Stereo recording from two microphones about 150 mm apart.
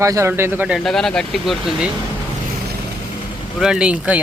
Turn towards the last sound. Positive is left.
turn(degrees=-5)  # may be behind; listen again after turning